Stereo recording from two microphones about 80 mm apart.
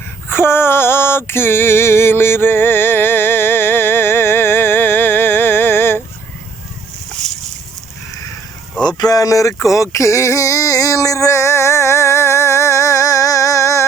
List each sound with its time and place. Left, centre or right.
0.3 s female singing: left
8.8 s speech: left
9.6 s a sound: left